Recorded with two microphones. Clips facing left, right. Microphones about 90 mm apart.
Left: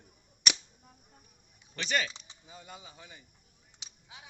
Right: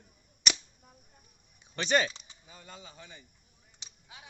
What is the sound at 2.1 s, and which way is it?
Speech, 15° left (ahead or behind).